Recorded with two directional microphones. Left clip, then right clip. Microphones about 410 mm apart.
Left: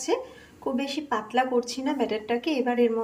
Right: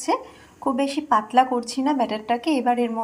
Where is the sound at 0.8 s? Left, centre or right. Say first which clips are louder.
Right 9 dB; centre.